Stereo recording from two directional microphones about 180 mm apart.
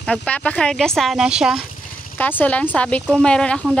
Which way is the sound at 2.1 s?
10° left (ahead or behind).